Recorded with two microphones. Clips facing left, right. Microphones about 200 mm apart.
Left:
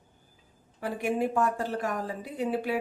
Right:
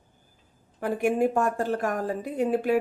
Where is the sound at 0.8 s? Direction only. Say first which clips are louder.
Right 5 dB; 50° right (ahead or behind).